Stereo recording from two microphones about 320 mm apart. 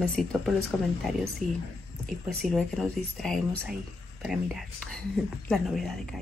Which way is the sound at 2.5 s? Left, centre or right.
Centre.